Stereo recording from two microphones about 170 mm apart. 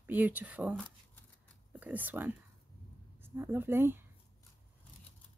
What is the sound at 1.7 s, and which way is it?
A woman's voice, 10° right (ahead or behind).